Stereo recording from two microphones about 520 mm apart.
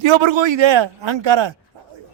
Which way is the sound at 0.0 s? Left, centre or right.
Right.